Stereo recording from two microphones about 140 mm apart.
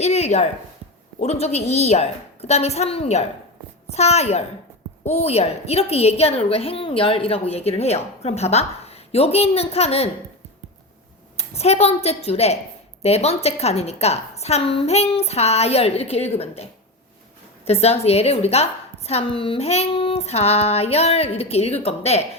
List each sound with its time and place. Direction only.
0.0 s a sound: 50° left (ahead or behind)
1.2 s a woman's voice: 50° left (ahead or behind)
11.3 s a woman's voice: 50° left (ahead or behind)
17.7 s a woman's voice: 50° left (ahead or behind)